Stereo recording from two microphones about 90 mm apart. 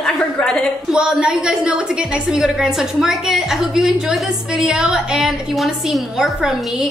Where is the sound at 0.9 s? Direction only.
10° right (ahead or behind).